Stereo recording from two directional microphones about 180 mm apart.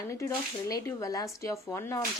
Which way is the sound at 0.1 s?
20° left (ahead or behind).